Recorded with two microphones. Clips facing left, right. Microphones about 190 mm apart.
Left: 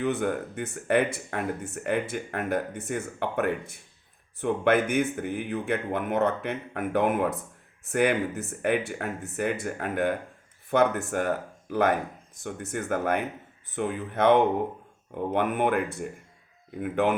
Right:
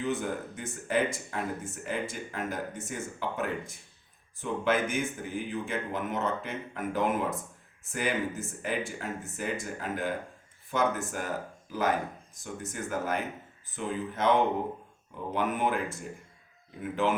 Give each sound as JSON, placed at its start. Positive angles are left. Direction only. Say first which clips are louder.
{"t": 0.0, "sound": "speech", "louder": "left 5 dB", "side_deg": 65}